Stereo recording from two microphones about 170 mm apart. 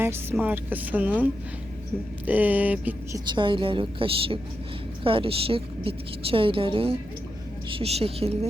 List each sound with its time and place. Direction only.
0.0 s speech: 15° right (ahead or behind)
3.2 s a woman's voice: 30° right (ahead or behind)